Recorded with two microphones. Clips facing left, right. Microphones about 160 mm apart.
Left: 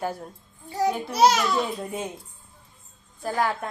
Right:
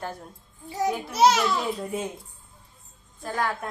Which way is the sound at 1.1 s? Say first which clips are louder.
Even; 25° right (ahead or behind).